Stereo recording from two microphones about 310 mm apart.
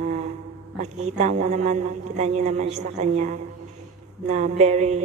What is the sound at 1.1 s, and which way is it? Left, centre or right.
Mantra, right.